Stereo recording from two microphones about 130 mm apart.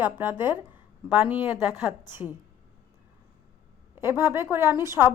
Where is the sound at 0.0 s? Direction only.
15° right (ahead or behind).